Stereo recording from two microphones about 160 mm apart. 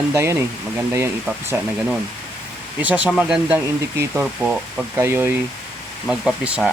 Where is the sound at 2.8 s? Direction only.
10° right (ahead or behind).